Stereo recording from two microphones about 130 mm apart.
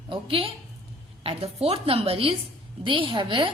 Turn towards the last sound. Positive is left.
turn(degrees=-40)  # may be behind; listen again after turning